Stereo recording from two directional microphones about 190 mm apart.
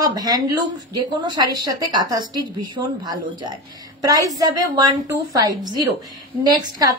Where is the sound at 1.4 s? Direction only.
20° right (ahead or behind).